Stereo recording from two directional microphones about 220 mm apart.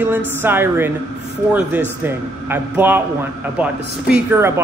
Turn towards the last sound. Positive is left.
turn(degrees=-10)  # may be behind; listen again after turning